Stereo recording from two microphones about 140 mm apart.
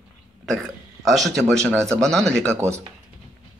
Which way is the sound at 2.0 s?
5° left (ahead or behind).